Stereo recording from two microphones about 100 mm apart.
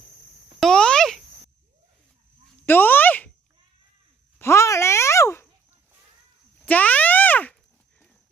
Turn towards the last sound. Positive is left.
turn(degrees=15)  # may be behind; listen again after turning